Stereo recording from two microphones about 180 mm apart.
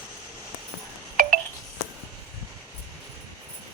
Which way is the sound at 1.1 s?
55° right (ahead or behind).